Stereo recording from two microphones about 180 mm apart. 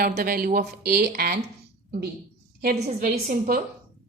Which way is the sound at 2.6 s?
55° right (ahead or behind).